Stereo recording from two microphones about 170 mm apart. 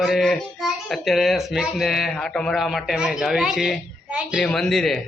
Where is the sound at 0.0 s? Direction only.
Centre (ahead or behind).